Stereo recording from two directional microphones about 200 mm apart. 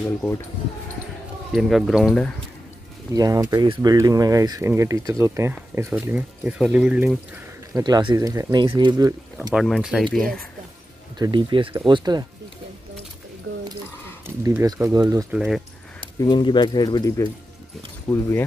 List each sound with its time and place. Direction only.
1.5 s speech: centre (ahead or behind)
3.1 s speech: 15° right (ahead or behind)
7.7 s speech: 20° right (ahead or behind)
9.5 s speech: 5° right (ahead or behind)
11.1 s speech: 20° right (ahead or behind)
14.2 s speech: 15° right (ahead or behind)
15.3 s speech: 5° right (ahead or behind)
16.2 s speech: 20° left (ahead or behind)
18.1 s speech: centre (ahead or behind)